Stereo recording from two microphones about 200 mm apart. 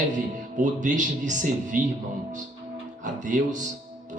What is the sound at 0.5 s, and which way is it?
Speech, 40° right (ahead or behind).